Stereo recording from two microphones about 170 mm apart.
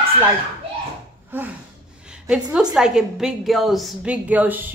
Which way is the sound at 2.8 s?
5° right (ahead or behind).